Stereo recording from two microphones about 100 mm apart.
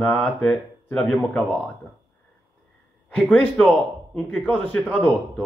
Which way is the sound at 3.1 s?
15° left (ahead or behind).